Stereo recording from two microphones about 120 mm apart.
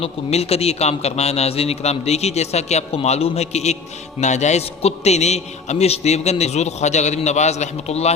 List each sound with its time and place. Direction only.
0.0 s a man's voice: 60° left (ahead or behind)